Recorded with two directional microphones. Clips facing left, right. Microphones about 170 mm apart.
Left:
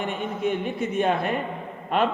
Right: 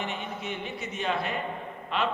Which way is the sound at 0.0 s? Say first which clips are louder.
Left 8 dB; 50° left (ahead or behind).